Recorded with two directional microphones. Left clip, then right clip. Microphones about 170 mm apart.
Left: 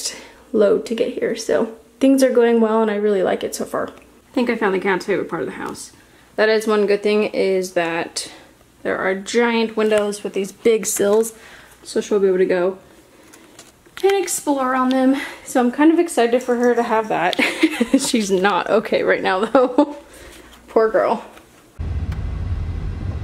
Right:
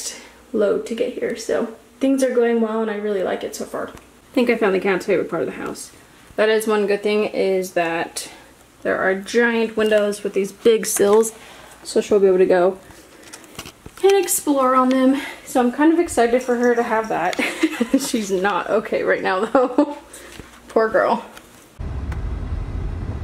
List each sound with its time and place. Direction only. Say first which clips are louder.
0.6 s speech: left 3 dB; 20° left (ahead or behind)
4.4 s speech: right 2 dB; centre (ahead or behind)
14.0 s speech: right 1 dB; 15° left (ahead or behind)
16.0 s speech: even; 5° left (ahead or behind)
17.4 s speech: left 3 dB; 20° left (ahead or behind); by 21.2 s centre (ahead or behind)